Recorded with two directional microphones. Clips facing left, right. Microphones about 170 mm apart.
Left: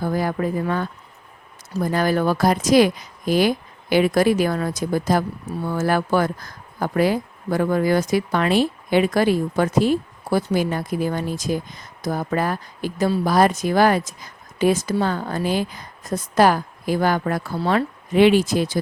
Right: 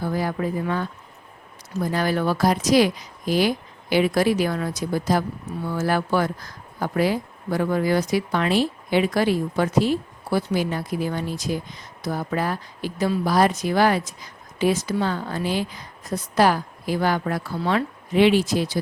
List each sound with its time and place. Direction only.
0.0 s speech: 50° left (ahead or behind)